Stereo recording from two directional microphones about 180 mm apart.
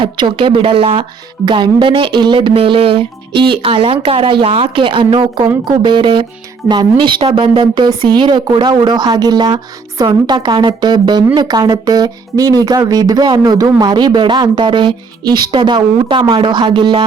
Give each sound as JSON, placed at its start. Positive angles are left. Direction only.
{"t": 0.0, "sound": "speech", "side_deg": -25}